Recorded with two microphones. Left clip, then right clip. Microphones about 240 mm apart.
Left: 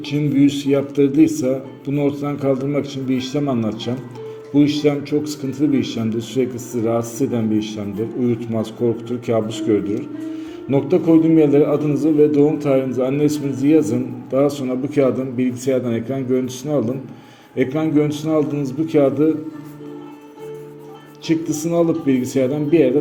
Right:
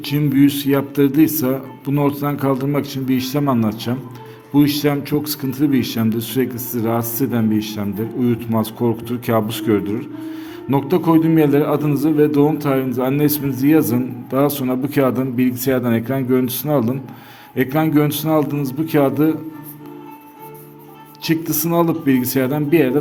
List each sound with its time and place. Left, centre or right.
0.0 s a man's voice: right
21.2 s a man's voice: right